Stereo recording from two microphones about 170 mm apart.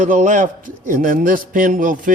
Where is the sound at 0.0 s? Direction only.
50° right (ahead or behind).